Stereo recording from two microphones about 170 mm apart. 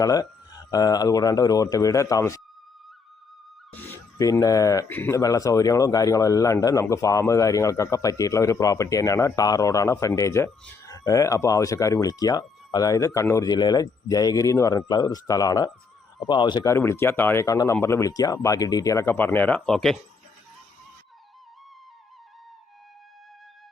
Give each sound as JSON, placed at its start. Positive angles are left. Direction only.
{"t": 0.0, "sound": "speech", "side_deg": 20}
{"t": 3.7, "sound": "speech", "side_deg": 10}
{"t": 16.7, "sound": "speech", "side_deg": 15}